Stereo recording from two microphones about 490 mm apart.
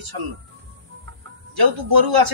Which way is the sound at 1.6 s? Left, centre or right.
Right.